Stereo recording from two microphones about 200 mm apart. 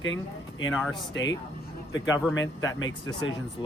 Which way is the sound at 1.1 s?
65° left (ahead or behind).